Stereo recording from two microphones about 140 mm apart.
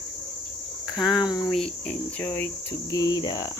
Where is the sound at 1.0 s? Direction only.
5° right (ahead or behind).